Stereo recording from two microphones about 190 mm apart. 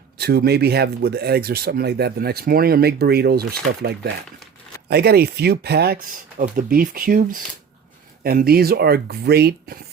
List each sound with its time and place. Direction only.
0.2 s speech: 55° right (ahead or behind)